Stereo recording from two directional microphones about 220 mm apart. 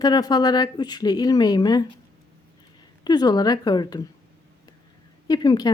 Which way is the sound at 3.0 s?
20° left (ahead or behind).